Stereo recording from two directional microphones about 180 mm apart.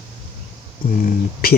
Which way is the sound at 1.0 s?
55° left (ahead or behind).